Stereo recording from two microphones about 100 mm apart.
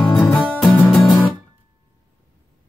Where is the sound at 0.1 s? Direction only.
10° left (ahead or behind).